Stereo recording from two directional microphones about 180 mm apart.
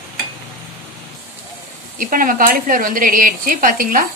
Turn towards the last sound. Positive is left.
turn(degrees=-50)  # may be behind; listen again after turning